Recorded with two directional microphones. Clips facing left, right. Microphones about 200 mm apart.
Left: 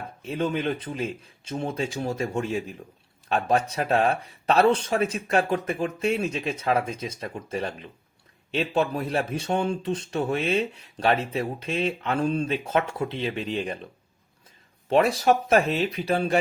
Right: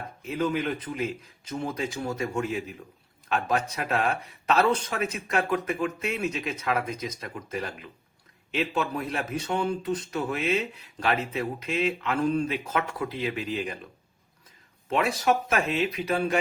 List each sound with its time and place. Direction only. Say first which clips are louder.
0.3 s speech: left 1 dB; 30° left (ahead or behind)
14.8 s speech: left 4 dB; 35° left (ahead or behind)